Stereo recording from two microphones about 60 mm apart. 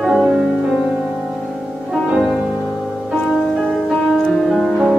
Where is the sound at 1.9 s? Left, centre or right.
Centre.